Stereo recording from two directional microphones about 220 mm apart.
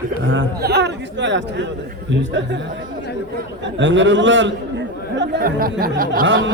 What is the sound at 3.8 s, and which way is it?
A man's voice, 55° right (ahead or behind).